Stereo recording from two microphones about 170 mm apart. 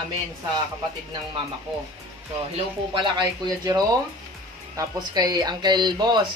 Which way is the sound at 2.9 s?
25° right (ahead or behind).